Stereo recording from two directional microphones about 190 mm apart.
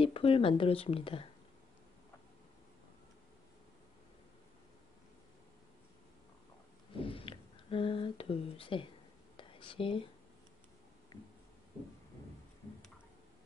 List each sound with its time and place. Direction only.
0.0 s speech: 30° left (ahead or behind)
7.0 s a sound: 30° left (ahead or behind)
9.4 s whispering: 25° left (ahead or behind)